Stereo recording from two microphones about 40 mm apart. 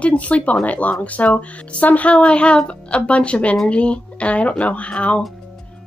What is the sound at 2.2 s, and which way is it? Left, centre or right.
A woman's voice, left.